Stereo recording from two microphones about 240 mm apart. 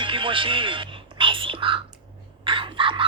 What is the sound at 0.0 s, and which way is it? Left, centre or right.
Whispering, right.